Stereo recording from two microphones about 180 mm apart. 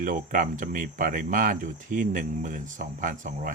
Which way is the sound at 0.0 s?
50° right (ahead or behind).